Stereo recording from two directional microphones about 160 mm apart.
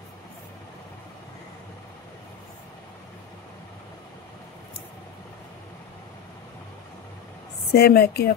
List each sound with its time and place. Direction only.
7.7 s a woman's voice: 75° left (ahead or behind)